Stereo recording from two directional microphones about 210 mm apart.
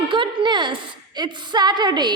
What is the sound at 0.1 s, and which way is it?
A woman's voice, 25° right (ahead or behind).